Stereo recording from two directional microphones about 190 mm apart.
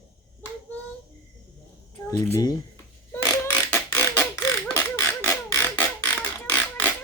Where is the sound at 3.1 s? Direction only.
15° left (ahead or behind).